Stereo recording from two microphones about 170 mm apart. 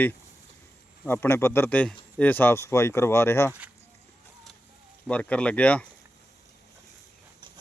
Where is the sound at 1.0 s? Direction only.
15° left (ahead or behind).